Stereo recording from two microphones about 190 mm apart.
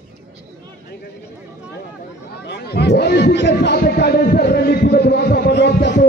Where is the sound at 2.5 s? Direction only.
60° left (ahead or behind).